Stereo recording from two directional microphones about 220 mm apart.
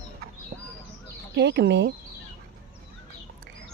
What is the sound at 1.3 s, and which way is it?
Speech, 50° right (ahead or behind).